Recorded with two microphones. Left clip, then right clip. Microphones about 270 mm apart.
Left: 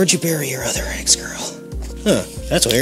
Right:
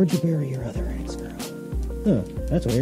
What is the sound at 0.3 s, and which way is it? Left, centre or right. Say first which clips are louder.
Speech: left 8 dB; centre.